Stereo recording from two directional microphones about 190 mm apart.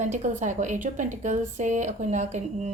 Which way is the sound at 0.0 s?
40° right (ahead or behind).